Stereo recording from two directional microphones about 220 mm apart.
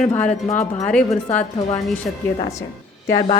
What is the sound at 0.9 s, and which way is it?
Speech, 5° left (ahead or behind).